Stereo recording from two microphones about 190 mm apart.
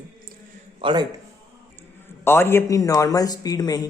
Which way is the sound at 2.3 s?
10° left (ahead or behind).